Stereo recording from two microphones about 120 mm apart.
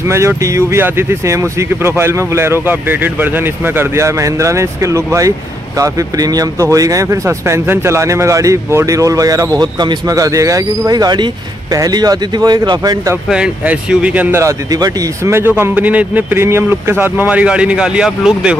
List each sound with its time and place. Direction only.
0.1 s speech: 25° right (ahead or behind)
13.3 s a man's voice: 10° right (ahead or behind)
14.4 s a man's voice: 30° right (ahead or behind); by 18.6 s 5° right (ahead or behind)